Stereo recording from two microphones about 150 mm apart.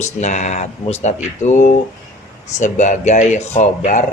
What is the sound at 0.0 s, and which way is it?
Speech, 50° left (ahead or behind).